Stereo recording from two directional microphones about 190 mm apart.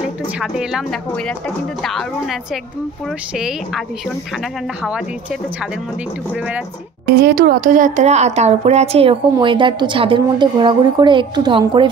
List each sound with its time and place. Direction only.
0.0 s speech: 5° right (ahead or behind)
7.2 s a woman's voice: 50° right (ahead or behind); by 11.9 s 25° right (ahead or behind)